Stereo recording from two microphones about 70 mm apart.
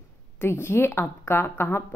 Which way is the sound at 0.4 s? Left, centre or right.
Left.